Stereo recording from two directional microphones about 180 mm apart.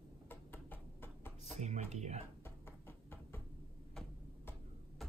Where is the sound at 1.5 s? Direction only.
40° right (ahead or behind).